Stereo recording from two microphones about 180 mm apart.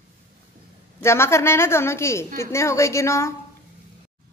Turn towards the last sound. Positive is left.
turn(degrees=15)  # may be behind; listen again after turning